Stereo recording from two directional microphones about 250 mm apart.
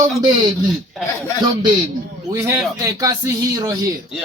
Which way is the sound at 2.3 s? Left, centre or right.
Centre.